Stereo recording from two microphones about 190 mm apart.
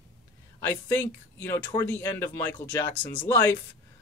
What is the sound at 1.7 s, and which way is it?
Speech, 10° left (ahead or behind).